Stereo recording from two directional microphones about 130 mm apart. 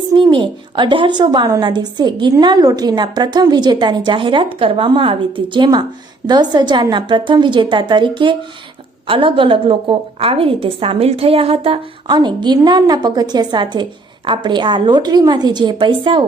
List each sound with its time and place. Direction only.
0.1 s a woman's voice: 35° right (ahead or behind)